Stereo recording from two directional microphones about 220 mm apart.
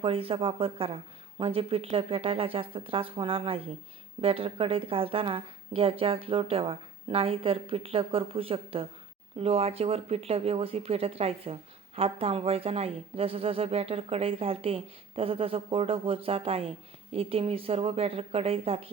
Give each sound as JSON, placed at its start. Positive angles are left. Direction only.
{"t": 0.0, "sound": "speech", "side_deg": -25}